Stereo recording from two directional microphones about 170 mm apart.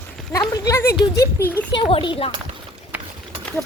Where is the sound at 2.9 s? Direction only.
10° right (ahead or behind).